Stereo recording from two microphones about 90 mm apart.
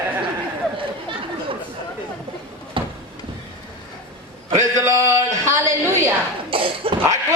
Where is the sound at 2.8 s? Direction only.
65° right (ahead or behind).